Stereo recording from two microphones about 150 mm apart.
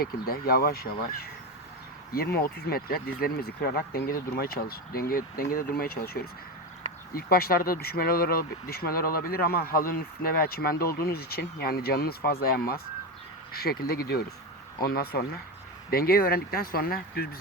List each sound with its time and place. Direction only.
0.0 s speech: 85° left
7.1 s speech: 80° left